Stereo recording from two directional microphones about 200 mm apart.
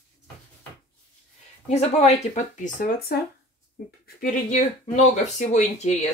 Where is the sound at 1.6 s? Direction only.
35° left (ahead or behind); by 3.2 s 50° left (ahead or behind).